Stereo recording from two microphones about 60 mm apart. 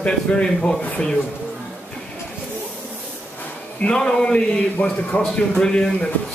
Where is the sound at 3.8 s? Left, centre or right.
Centre.